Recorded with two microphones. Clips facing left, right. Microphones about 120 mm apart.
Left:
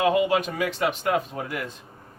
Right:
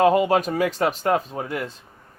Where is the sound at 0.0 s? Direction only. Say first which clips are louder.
Right 4 dB; 40° right (ahead or behind).